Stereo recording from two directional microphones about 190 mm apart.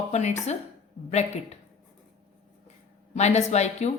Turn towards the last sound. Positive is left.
turn(degrees=35)  # may be behind; listen again after turning